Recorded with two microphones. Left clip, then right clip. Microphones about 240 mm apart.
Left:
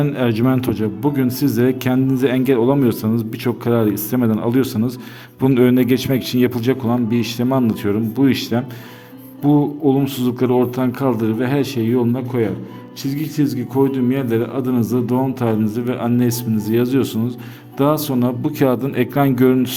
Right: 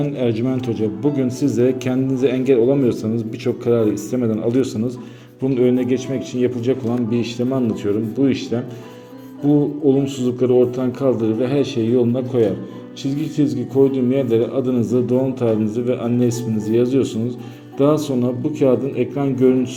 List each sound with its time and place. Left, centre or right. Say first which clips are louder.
0.0 s a man's voice: left 2 dB; left
5.4 s a man's voice: left 3 dB; left
6.8 s a man's voice: left 2 dB; left
9.9 s a man's voice: even; left
19.2 s a man's voice: left 1 dB; left